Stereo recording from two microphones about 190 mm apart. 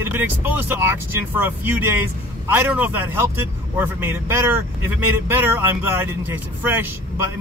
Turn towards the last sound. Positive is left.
turn(degrees=-10)  # may be behind; listen again after turning